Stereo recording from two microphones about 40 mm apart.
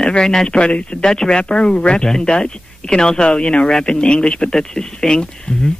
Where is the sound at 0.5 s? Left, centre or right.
Left.